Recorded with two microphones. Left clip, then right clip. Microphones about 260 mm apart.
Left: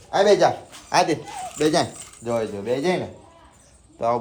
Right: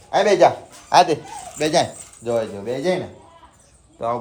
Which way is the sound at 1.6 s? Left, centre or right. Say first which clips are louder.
Right 2 dB; centre.